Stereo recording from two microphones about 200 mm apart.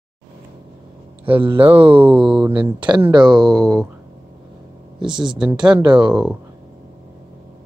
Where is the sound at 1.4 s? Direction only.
25° right (ahead or behind).